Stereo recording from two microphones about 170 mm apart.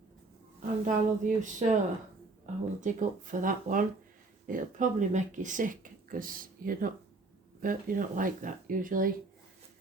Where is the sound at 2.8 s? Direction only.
50° right (ahead or behind).